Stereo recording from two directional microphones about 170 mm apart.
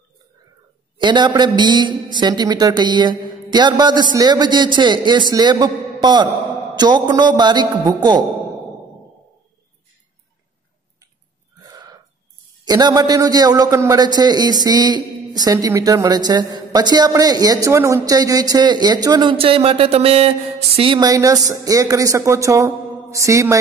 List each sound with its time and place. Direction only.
0.9 s a man's voice: 25° right (ahead or behind)
11.6 s a sound: 20° right (ahead or behind)
12.6 s a man's voice: 25° right (ahead or behind)